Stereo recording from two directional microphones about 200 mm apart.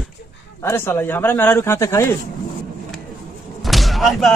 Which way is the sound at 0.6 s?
10° left (ahead or behind).